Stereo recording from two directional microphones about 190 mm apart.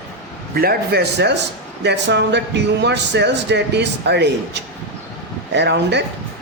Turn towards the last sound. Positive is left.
turn(degrees=-65)  # may be behind; listen again after turning